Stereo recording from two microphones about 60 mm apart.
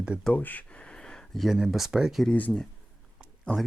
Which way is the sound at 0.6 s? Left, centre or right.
Centre.